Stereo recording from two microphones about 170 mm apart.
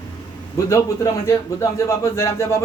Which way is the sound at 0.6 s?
20° left (ahead or behind).